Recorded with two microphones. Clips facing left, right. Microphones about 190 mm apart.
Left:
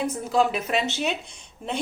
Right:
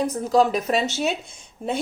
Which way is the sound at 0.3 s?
40° right (ahead or behind).